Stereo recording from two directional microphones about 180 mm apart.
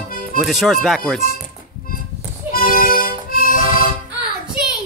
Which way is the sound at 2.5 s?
55° left (ahead or behind).